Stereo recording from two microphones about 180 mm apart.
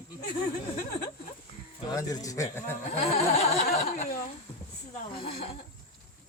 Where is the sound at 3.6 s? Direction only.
45° left (ahead or behind).